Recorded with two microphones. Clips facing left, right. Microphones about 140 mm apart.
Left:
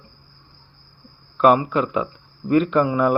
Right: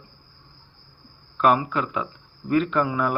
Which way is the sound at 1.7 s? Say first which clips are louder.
Left 5 dB; 20° left (ahead or behind).